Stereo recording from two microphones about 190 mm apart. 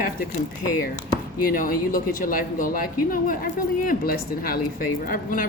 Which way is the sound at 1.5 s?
45° left (ahead or behind).